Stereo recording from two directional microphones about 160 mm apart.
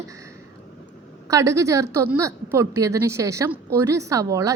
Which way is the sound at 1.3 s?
20° right (ahead or behind).